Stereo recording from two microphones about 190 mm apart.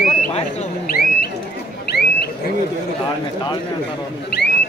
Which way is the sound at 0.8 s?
55° left (ahead or behind).